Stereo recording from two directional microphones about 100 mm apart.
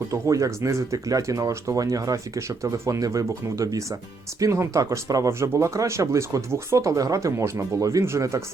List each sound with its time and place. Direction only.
0.1 s speech: 35° right (ahead or behind)